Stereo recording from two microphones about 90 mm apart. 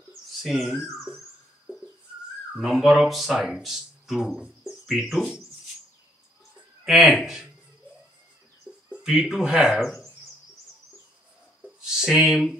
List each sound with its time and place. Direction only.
0.4 s speech: 5° right (ahead or behind)
2.5 s speech: 5° right (ahead or behind)
6.8 s a sound: 5° right (ahead or behind)
7.2 s speech: 5° right (ahead or behind)
8.7 s bird: 10° right (ahead or behind)
9.0 s speech: 5° right (ahead or behind)
9.8 s speech: 5° left (ahead or behind)
11.8 s speech: 5° right (ahead or behind)